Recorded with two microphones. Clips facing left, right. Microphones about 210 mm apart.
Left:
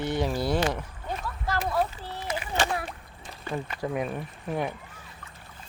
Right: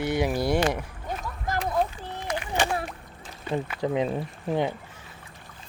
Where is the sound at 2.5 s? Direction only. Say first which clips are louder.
Right 1 dB; 15° right (ahead or behind).